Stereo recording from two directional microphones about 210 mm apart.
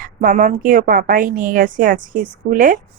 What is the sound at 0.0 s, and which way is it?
Speech, 40° right (ahead or behind).